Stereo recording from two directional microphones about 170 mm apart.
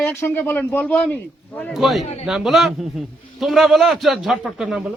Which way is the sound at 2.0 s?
40° left (ahead or behind).